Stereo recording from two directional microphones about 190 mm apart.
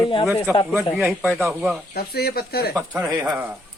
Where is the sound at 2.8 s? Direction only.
15° right (ahead or behind).